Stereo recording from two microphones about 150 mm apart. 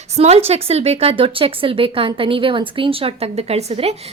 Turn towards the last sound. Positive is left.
turn(degrees=-45)  # may be behind; listen again after turning